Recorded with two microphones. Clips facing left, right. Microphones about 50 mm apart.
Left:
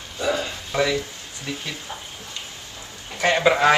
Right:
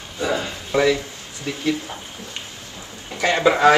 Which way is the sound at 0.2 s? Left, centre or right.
Right.